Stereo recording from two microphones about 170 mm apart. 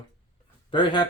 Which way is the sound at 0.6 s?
30° left (ahead or behind).